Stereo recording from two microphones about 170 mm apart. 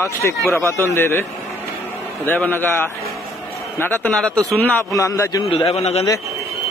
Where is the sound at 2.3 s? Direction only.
10° left (ahead or behind).